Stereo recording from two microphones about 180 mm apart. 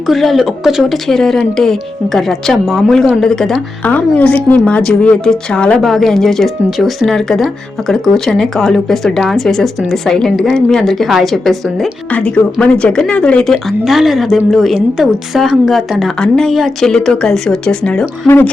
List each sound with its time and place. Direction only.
0.1 s speech: centre (ahead or behind)